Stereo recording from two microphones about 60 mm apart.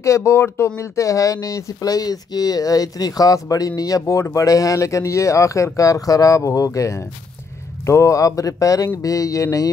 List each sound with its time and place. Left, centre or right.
0.0 s speech: left